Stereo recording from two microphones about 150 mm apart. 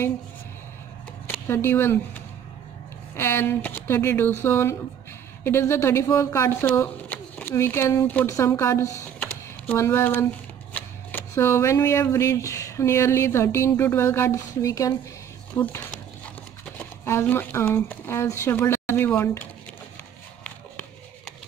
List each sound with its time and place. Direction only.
1.5 s speech: 15° left (ahead or behind)
3.2 s speech: 15° left (ahead or behind)
9.2 s a sound: 15° left (ahead or behind)
10.7 s speech: 10° left (ahead or behind)
15.6 s speech: 10° left (ahead or behind)
17.0 s speech: 15° left (ahead or behind)